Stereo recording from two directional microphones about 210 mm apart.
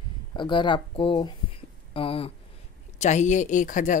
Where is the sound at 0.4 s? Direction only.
20° left (ahead or behind).